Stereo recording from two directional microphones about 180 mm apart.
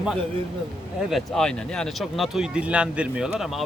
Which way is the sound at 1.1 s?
Centre (ahead or behind).